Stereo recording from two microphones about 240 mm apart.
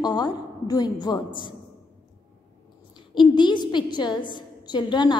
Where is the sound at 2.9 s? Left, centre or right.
Centre.